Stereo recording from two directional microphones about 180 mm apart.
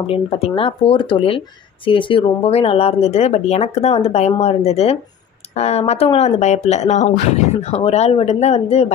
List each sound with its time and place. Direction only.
0.0 s speech: 30° left (ahead or behind)